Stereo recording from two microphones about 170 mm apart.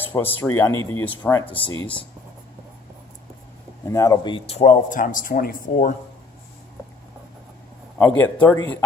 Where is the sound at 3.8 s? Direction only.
20° left (ahead or behind); by 5.6 s 55° left (ahead or behind).